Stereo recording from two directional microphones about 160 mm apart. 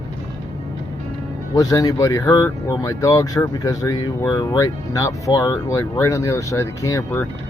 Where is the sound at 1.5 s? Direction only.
20° left (ahead or behind).